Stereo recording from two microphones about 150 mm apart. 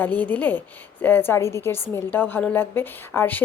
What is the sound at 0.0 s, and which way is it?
A woman's voice, 10° left (ahead or behind).